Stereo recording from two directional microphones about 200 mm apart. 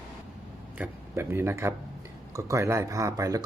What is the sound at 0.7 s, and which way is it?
Speech, 10° right (ahead or behind).